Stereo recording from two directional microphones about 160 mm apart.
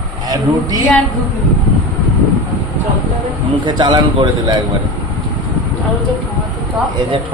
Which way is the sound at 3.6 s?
30° right (ahead or behind).